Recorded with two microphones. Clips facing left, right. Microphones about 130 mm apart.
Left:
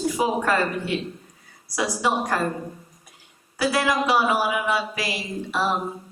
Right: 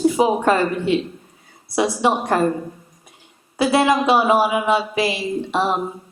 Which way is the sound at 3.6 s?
25° right (ahead or behind).